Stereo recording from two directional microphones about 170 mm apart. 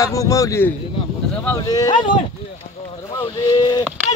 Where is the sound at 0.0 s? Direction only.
20° left (ahead or behind).